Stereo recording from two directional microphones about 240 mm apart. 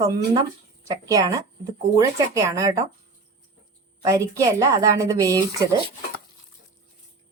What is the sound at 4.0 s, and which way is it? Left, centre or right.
Speech, centre.